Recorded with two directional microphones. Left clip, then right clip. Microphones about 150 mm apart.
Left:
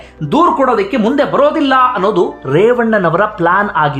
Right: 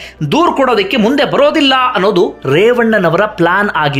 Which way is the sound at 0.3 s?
10° right (ahead or behind).